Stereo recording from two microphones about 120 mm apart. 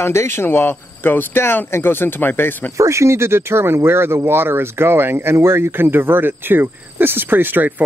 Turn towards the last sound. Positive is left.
turn(degrees=-15)  # may be behind; listen again after turning